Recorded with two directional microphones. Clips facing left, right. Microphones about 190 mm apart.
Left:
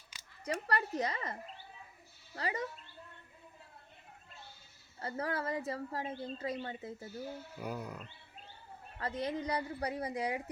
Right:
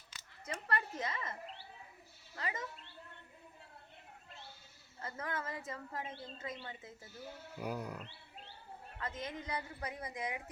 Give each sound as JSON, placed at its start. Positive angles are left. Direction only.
{"t": 0.1, "sound": "a sound", "side_deg": 15}
{"t": 0.4, "sound": "a woman's voice", "side_deg": 40}
{"t": 4.9, "sound": "a woman's voice", "side_deg": 35}
{"t": 7.6, "sound": "speech", "side_deg": -10}
{"t": 9.0, "sound": "a woman's voice", "side_deg": 35}